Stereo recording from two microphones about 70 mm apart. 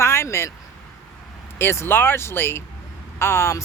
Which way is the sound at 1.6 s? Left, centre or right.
Left.